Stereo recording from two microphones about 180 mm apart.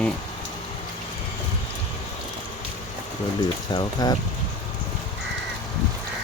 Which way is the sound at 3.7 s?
20° left (ahead or behind).